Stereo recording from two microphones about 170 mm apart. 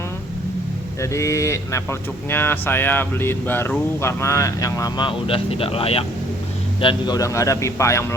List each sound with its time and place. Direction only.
1.1 s a man's voice: 20° left (ahead or behind)